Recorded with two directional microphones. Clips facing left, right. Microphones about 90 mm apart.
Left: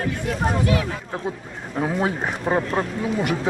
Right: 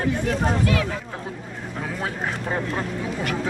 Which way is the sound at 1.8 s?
20° left (ahead or behind).